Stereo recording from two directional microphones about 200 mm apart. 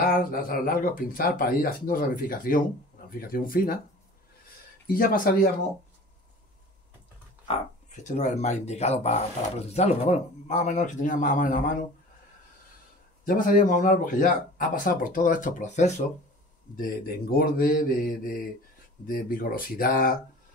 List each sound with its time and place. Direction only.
0.0 s speech: 45° left (ahead or behind)
4.8 s speech: 45° left (ahead or behind)
7.4 s speech: 35° left (ahead or behind)
13.2 s speech: 45° left (ahead or behind)